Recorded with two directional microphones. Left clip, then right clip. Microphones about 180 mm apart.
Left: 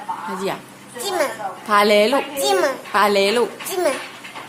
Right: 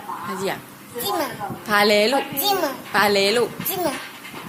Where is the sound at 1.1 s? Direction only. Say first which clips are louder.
Left 8 dB; 10° left (ahead or behind).